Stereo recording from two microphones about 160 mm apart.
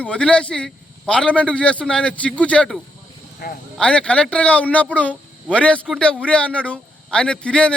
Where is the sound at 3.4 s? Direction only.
70° left (ahead or behind).